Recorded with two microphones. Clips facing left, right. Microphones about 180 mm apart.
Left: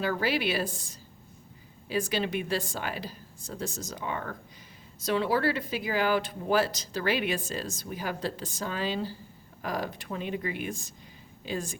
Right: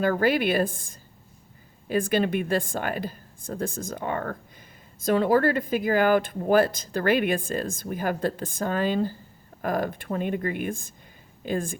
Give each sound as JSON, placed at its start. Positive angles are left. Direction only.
{"t": 0.0, "sound": "speech", "side_deg": -50}